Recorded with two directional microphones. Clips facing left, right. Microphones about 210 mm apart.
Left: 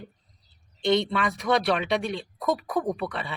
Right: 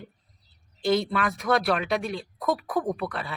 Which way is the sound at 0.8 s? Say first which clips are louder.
Left 1 dB; centre (ahead or behind).